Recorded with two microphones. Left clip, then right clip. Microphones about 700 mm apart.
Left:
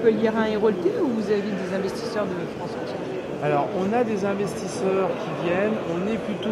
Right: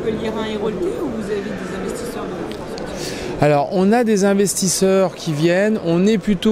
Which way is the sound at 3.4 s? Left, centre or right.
Right.